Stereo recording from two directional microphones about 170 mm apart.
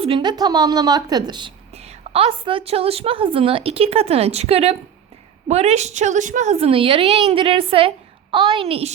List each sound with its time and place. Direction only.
0.0 s a woman's voice: 30° right (ahead or behind)